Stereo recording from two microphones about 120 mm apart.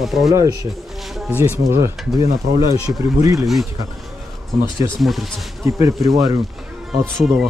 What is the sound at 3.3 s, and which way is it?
Speech, centre (ahead or behind).